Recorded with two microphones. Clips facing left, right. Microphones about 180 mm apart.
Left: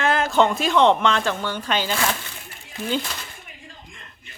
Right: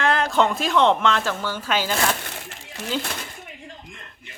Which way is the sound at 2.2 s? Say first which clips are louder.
Right 5 dB; 80° right.